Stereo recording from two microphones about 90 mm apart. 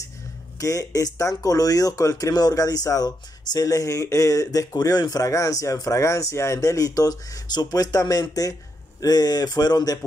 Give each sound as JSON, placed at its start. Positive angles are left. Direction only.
{"t": 0.6, "sound": "speech", "side_deg": 40}